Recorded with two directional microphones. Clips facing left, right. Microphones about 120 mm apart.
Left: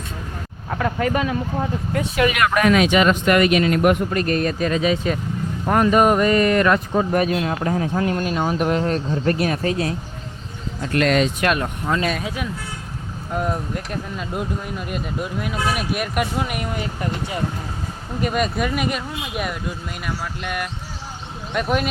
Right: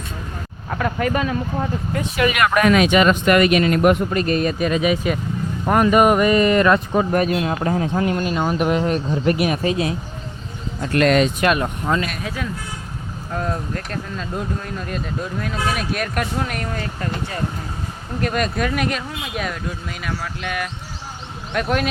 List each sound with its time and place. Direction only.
0.8 s speech: 30° left (ahead or behind)
1.9 s speech: 60° left (ahead or behind)
2.6 s speech: 55° right (ahead or behind)
3.8 s speech: 20° right (ahead or behind)
7.1 s speech: centre (ahead or behind)
7.6 s speech: 35° right (ahead or behind)
7.9 s speech: 5° right (ahead or behind)
10.9 s speech: 50° right (ahead or behind)
11.9 s speech: 20° left (ahead or behind)
18.2 s speech: 5° left (ahead or behind)